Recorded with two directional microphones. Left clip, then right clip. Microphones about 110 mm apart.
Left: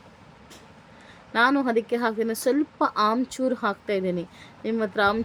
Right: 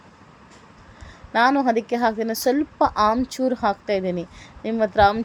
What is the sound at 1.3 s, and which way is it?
Speech, 20° right (ahead or behind).